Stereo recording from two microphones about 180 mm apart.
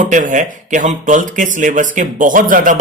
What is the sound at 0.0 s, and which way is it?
Speech, 45° right (ahead or behind).